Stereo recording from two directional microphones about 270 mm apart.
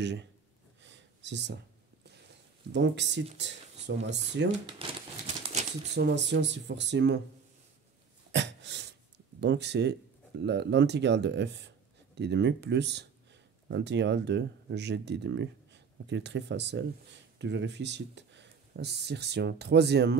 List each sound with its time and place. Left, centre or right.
0.0 s speech: right
0.8 s a sound: right
2.7 s speech: right
4.7 s crumpling: right
5.9 s speech: right
8.3 s a sound: right
9.4 s speech: right